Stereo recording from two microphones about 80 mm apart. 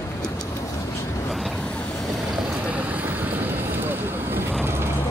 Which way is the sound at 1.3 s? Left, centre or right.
Centre.